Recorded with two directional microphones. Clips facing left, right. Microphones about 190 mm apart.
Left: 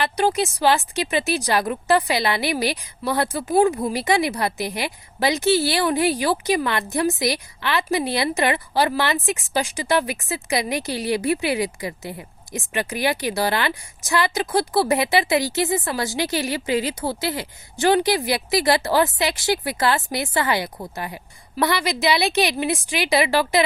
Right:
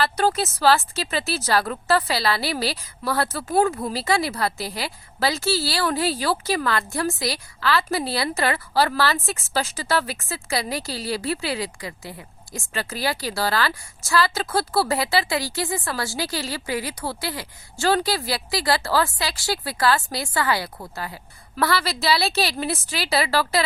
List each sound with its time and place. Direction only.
0.0 s a woman's voice: 15° left (ahead or behind)